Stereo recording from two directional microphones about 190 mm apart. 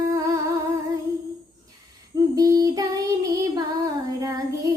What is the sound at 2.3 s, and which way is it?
Child singing, 20° right (ahead or behind).